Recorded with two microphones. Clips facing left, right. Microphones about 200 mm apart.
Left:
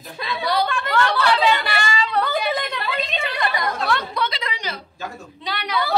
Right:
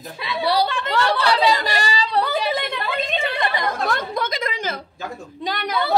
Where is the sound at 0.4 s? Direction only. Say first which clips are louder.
Right 2 dB; 30° right (ahead or behind).